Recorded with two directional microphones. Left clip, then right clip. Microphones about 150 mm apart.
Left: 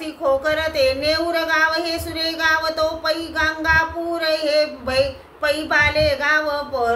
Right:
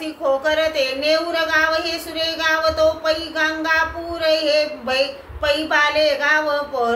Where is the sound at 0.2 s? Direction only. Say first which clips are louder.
Right 1 dB; 30° left (ahead or behind).